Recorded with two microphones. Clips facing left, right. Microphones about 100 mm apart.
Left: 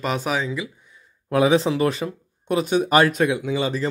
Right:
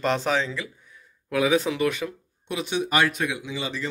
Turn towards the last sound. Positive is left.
turn(degrees=45)  # may be behind; listen again after turning